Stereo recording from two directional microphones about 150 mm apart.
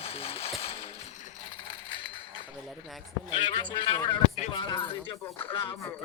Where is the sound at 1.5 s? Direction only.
35° left (ahead or behind).